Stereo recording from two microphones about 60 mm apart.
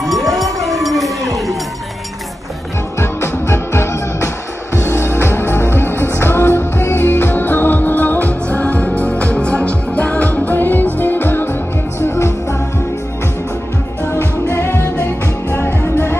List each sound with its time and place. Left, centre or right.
0.0 s a sound: centre
3.0 s music: left
14.5 s music: left
15.8 s music: left